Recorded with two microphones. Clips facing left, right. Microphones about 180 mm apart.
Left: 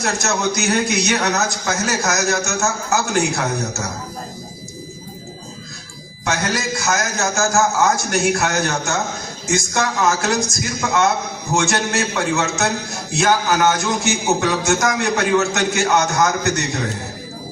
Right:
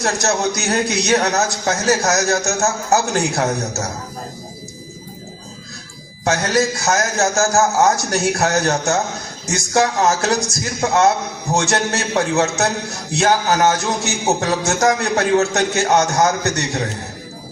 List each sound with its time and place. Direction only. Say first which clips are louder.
0.0 s a man's voice: right 2 dB; 35° right (ahead or behind)
6.2 s a man's voice: right 5 dB; 35° right (ahead or behind)